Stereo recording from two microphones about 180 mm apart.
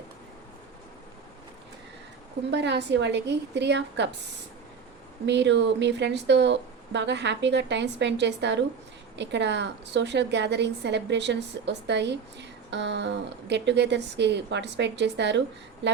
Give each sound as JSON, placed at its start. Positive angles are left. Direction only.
{"t": 2.5, "sound": "a woman's voice", "side_deg": -70}
{"t": 5.2, "sound": "a woman's voice", "side_deg": -75}